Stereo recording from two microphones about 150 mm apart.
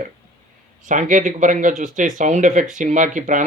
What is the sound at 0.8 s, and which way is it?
Speech, 60° right (ahead or behind).